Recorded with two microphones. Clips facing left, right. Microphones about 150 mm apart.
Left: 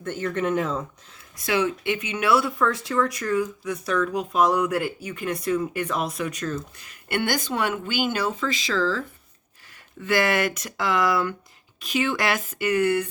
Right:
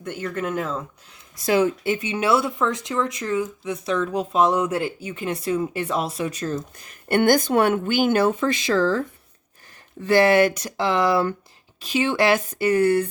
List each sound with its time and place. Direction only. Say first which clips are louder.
0.0 s speech: left 2 dB; 10° right (ahead or behind)
1.5 s speech: right 4 dB; 45° right (ahead or behind)
7.2 s speech: right 8 dB; 50° right (ahead or behind)
10.0 s speech: right 6 dB; 35° right (ahead or behind)